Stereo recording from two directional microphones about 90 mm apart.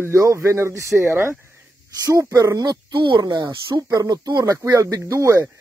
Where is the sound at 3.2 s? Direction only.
45° right (ahead or behind).